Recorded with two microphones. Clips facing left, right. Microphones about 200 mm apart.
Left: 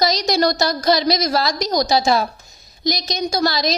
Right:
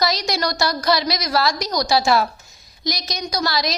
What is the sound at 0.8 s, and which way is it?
A woman's voice, 20° left (ahead or behind).